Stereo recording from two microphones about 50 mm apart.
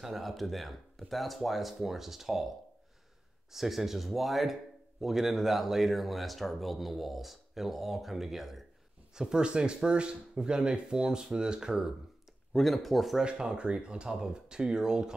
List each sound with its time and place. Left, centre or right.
0.0 s speech: centre
3.5 s speech: centre
12.5 s speech: centre
13.2 s speech: centre